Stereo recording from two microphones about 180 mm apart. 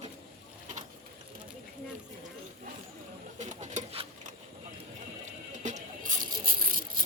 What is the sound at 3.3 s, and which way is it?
Bird, 40° right (ahead or behind).